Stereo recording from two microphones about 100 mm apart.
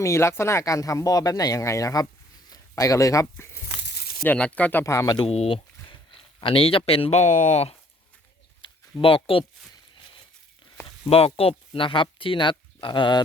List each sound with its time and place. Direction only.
0.0 s speech: 30° left (ahead or behind)
4.2 s speech: 15° left (ahead or behind)
5.2 s speech: 80° left
6.4 s speech: 70° left (ahead or behind); by 7.8 s 90° left
8.6 s a sound: 65° left (ahead or behind)
10.8 s speech: 70° left (ahead or behind); by 13.2 s 50° left (ahead or behind)